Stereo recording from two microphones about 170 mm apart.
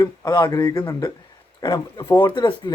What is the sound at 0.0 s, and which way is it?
Speech, 20° left (ahead or behind).